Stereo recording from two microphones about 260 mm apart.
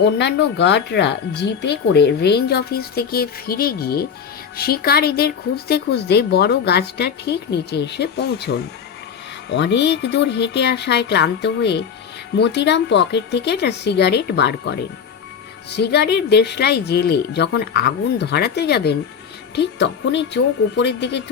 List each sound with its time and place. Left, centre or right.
0.0 s speech: left